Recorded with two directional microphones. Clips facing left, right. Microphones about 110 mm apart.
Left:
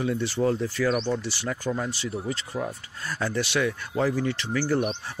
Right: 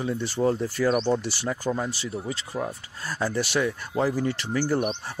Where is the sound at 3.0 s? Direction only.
25° right (ahead or behind).